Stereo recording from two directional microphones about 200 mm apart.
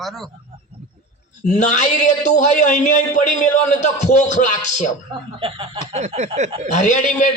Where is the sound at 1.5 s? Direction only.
35° left (ahead or behind).